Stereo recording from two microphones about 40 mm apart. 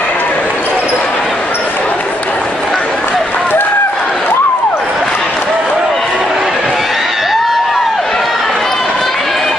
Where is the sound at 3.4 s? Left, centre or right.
Left.